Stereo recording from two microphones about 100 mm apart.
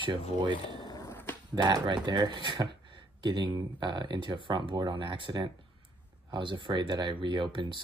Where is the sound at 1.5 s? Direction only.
45° right (ahead or behind).